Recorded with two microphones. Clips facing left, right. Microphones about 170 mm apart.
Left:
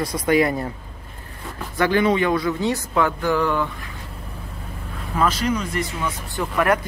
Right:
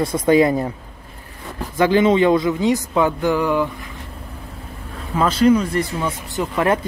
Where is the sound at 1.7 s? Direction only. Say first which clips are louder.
Right 4 dB; 20° right (ahead or behind).